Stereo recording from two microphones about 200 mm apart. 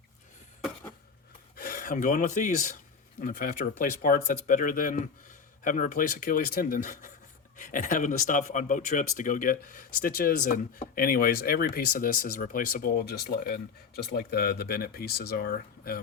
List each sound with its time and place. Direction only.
1.5 s speech: 45° left (ahead or behind)